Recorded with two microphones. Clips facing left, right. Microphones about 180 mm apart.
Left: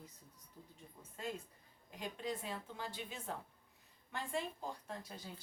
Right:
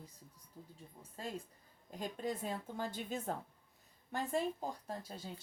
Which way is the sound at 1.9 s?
45° right (ahead or behind).